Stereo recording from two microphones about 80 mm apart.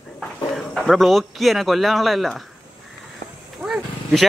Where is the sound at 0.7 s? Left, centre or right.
Centre.